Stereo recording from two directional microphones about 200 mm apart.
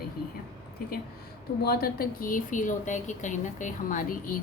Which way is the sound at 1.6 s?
50° left (ahead or behind).